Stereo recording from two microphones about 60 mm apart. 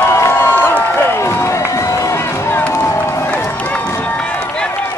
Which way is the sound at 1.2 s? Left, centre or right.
Left.